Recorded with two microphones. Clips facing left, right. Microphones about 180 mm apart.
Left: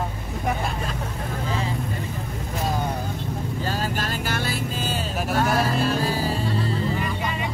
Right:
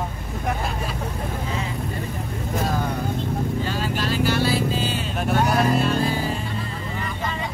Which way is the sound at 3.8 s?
45° left (ahead or behind).